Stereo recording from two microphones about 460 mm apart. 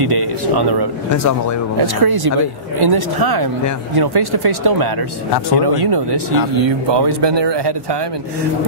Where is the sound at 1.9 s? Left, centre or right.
Right.